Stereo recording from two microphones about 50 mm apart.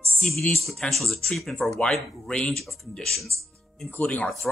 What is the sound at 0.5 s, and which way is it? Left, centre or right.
Speech, centre.